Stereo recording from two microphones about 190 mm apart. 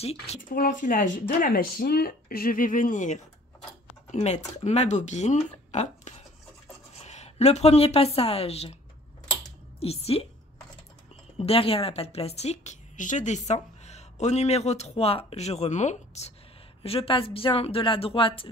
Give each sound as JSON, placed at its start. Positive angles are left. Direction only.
{"t": 0.0, "sound": "a woman's voice", "side_deg": 30}
{"t": 0.4, "sound": "a woman's voice", "side_deg": 45}
{"t": 9.8, "sound": "a woman's voice", "side_deg": 30}
{"t": 11.3, "sound": "a woman's voice", "side_deg": 30}